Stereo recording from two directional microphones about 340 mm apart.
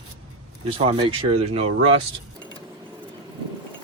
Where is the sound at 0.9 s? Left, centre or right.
Centre.